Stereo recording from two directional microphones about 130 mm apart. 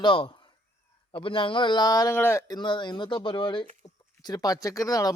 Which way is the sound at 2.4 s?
35° left (ahead or behind).